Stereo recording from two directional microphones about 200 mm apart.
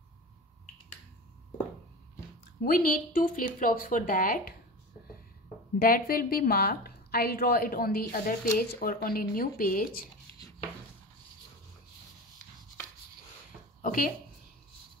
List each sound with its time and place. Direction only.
2.6 s a woman's voice: 45° left (ahead or behind)
5.8 s a woman's voice: 45° left (ahead or behind)
13.8 s a sound: 45° left (ahead or behind)